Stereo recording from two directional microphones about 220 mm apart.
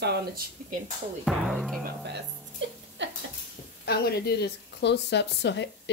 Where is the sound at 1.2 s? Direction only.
Centre (ahead or behind).